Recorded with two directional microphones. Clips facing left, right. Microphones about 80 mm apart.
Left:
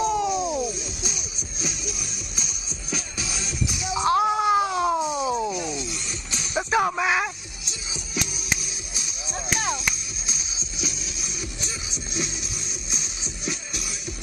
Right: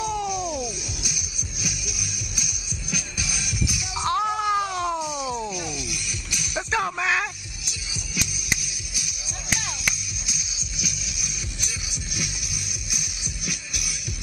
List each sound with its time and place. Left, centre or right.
0.0 s music: left